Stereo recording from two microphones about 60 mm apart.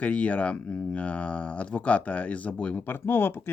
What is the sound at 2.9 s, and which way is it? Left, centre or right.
Speech, left.